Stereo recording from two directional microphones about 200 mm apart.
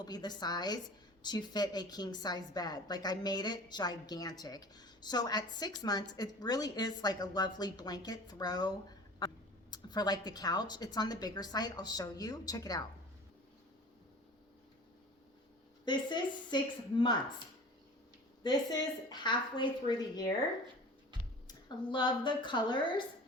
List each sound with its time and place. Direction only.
0.0 s a woman's voice: 20° left (ahead or behind)
15.8 s a woman's voice: 20° left (ahead or behind)
18.4 s a woman's voice: 20° left (ahead or behind)
21.4 s a woman's voice: 25° left (ahead or behind)